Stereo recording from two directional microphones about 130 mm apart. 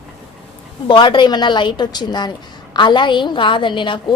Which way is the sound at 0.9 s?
35° left (ahead or behind).